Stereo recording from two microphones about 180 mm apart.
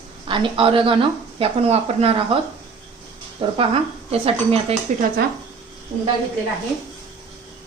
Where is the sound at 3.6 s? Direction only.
30° right (ahead or behind).